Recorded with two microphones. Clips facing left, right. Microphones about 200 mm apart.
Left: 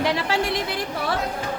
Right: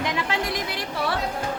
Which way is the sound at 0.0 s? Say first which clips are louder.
Left 4 dB; 35° left (ahead or behind).